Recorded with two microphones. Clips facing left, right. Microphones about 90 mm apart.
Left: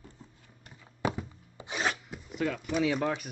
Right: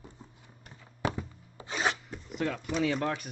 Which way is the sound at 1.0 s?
10° left (ahead or behind).